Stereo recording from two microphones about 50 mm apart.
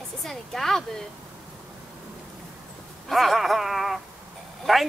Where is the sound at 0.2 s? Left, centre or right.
Centre.